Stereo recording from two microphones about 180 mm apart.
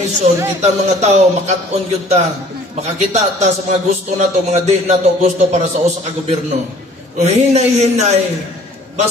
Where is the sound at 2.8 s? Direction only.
40° right (ahead or behind).